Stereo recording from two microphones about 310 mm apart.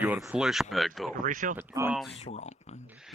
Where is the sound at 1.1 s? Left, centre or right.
Right.